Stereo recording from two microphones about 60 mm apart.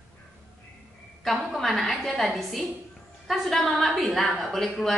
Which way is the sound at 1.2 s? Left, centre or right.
Centre.